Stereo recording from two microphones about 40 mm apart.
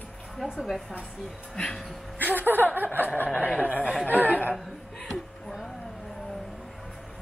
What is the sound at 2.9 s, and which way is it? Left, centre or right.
Speech, left.